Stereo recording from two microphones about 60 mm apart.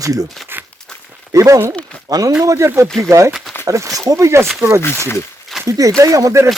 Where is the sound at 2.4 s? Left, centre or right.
Right.